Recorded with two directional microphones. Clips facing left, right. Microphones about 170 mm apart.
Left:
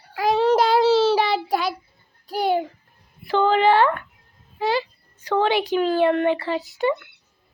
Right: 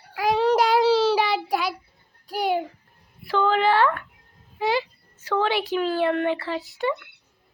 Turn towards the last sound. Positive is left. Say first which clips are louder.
# left 4 dB
turn(degrees=0)  # may be behind; listen again after turning